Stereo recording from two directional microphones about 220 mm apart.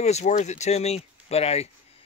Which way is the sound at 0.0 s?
30° left (ahead or behind).